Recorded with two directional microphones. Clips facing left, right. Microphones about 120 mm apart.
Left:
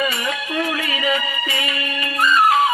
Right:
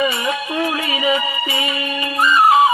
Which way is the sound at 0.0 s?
15° right (ahead or behind).